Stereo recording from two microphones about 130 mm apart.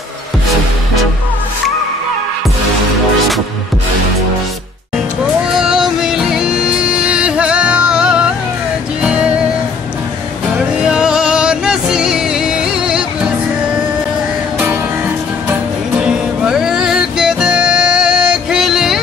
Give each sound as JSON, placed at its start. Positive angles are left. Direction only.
{"t": 5.5, "sound": "music", "side_deg": -5}
{"t": 10.8, "sound": "music", "side_deg": -5}
{"t": 16.0, "sound": "music", "side_deg": -5}